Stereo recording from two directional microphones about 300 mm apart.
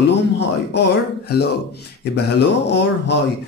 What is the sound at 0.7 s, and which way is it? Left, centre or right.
A man's voice, left.